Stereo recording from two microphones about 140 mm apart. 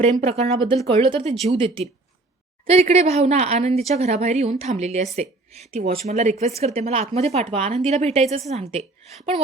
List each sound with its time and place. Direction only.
0.0 s a woman's voice: 45° right (ahead or behind)